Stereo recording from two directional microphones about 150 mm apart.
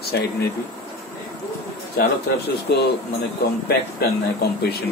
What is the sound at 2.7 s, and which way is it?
Speech, 90° left.